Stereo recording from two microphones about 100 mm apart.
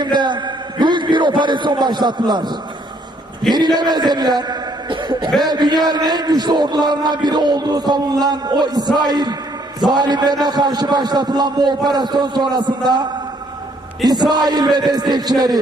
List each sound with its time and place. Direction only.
0.0 s a man's voice: 50° right (ahead or behind)
14.1 s a man's voice: 45° right (ahead or behind)